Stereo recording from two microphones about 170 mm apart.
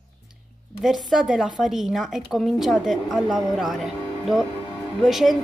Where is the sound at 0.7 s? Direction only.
Centre (ahead or behind).